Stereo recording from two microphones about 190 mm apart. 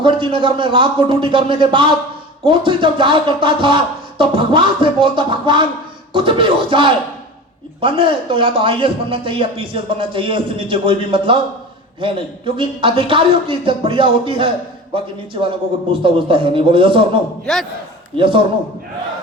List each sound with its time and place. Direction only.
0.0 s speech: 25° right (ahead or behind)
17.4 s a man's voice: centre (ahead or behind)
18.2 s speech: 25° right (ahead or behind)